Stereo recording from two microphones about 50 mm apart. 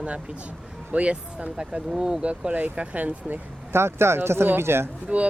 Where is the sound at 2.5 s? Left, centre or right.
Right.